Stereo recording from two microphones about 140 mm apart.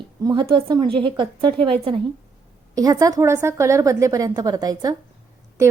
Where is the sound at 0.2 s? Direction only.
25° right (ahead or behind).